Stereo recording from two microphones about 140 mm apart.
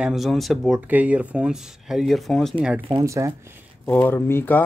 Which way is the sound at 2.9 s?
20° right (ahead or behind).